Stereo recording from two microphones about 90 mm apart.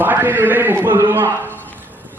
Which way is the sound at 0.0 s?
20° right (ahead or behind).